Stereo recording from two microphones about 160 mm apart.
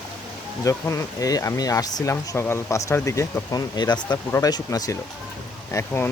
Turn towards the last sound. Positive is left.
turn(degrees=15)  # may be behind; listen again after turning